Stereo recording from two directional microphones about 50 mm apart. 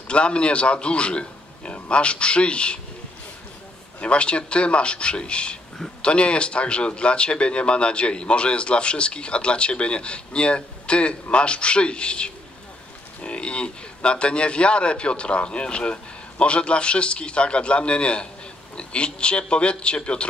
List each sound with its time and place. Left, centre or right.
0.1 s speech: left
4.0 s speech: left